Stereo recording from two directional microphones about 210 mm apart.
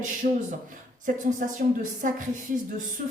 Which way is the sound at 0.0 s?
35° right (ahead or behind).